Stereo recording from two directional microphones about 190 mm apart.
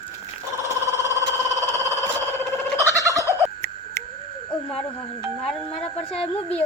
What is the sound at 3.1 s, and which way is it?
Fowl, 15° right (ahead or behind).